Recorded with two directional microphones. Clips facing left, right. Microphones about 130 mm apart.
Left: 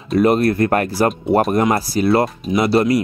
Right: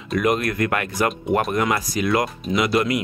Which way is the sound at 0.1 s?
35° left (ahead or behind).